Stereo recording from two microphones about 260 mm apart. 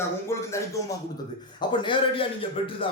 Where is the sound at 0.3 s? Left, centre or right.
Centre.